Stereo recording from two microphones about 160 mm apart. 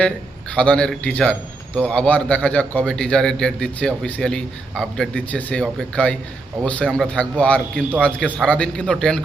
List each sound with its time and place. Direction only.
0.5 s a man's voice: 5° left (ahead or behind)